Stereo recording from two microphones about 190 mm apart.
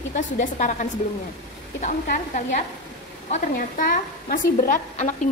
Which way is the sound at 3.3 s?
45° left (ahead or behind).